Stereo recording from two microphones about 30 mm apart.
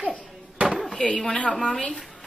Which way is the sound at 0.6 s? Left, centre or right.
Right.